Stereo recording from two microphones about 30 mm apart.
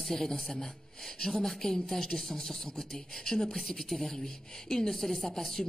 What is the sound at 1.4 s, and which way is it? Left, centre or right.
Speech, centre.